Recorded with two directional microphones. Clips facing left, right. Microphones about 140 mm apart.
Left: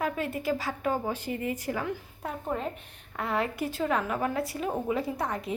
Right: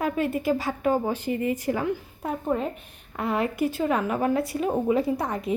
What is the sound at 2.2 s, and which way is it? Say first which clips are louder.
A woman's voice: right 5 dB; 10° right (ahead or behind).